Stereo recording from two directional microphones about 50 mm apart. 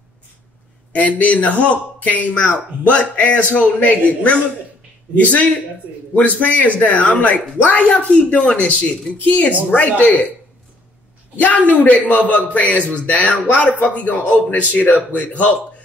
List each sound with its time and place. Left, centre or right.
0.9 s a man's voice: left
11.3 s a man's voice: left